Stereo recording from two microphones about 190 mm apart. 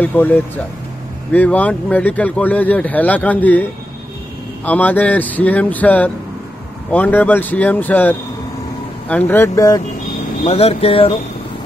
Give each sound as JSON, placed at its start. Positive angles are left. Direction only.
{"t": 0.0, "sound": "speech", "side_deg": 10}
{"t": 4.6, "sound": "speech", "side_deg": 10}
{"t": 10.4, "sound": "speech", "side_deg": 30}